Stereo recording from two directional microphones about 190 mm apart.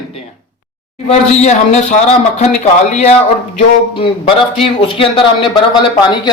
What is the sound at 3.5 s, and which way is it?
Speech, 30° left (ahead or behind).